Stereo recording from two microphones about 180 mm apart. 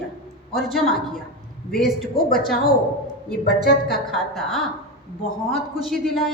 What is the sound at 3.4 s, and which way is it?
Speech, 60° left (ahead or behind).